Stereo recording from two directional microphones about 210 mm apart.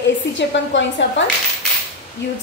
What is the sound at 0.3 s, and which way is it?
Speech, 60° left (ahead or behind).